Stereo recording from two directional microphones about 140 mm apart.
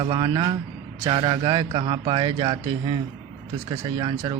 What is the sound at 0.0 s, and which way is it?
Speech, 40° right (ahead or behind).